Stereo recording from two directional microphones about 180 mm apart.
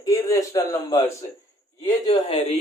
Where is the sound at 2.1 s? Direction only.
30° left (ahead or behind).